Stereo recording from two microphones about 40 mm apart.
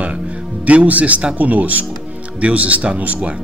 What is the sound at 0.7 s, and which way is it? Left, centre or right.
Speech, right.